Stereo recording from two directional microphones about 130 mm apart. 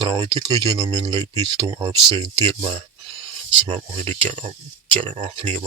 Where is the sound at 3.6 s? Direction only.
45° right (ahead or behind).